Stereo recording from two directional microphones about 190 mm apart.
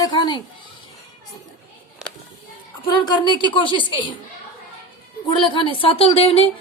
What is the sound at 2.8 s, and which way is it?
A woman's voice, 20° left (ahead or behind).